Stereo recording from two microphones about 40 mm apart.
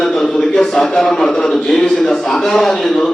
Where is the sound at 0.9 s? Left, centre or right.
Centre.